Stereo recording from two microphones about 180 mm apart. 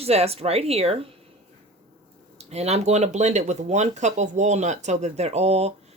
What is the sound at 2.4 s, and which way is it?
Speech, 35° right (ahead or behind).